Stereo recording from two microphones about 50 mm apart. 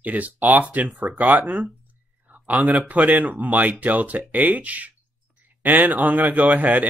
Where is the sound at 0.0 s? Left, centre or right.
Right.